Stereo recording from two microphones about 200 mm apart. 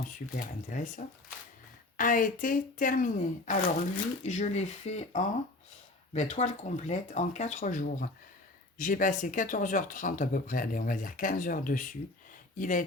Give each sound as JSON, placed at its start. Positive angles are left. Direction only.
{"t": 0.3, "sound": "speech", "side_deg": 40}